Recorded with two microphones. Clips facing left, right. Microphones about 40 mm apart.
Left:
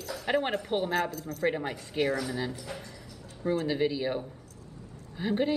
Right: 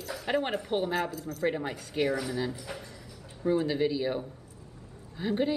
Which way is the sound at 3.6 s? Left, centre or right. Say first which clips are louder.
Even; centre.